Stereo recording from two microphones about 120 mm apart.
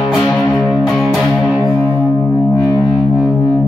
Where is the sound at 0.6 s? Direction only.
10° right (ahead or behind).